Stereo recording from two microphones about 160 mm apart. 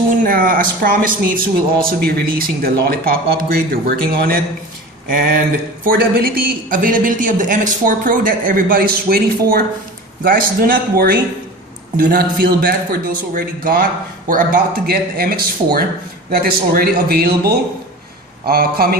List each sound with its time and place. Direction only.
0.1 s speech: 60° right (ahead or behind)